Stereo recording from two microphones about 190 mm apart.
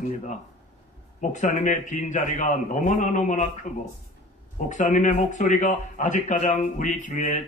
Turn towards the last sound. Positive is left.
turn(degrees=40)  # may be behind; listen again after turning